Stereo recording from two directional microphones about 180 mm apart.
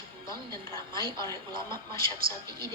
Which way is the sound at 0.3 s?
20° left (ahead or behind).